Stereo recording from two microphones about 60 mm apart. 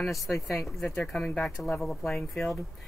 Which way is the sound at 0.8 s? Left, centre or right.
Left.